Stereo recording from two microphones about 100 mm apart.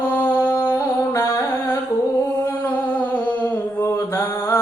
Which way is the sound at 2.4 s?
20° left (ahead or behind).